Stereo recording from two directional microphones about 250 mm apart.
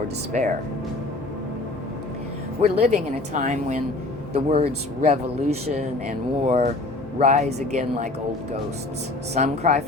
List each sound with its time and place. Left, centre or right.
0.3 s speech: right
2.6 s speech: right
9.3 s speech: right